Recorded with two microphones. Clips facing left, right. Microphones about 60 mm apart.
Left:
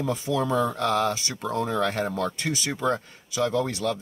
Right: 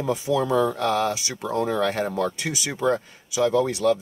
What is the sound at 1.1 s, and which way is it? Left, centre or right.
Speech, centre.